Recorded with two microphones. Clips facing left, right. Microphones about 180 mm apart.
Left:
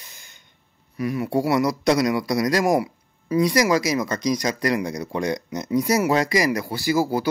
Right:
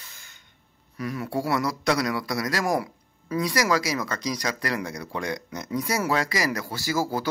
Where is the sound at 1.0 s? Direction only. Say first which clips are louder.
Left 6 dB; 15° left (ahead or behind).